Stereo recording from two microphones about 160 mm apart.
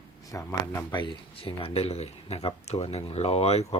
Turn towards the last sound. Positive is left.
turn(degrees=40)  # may be behind; listen again after turning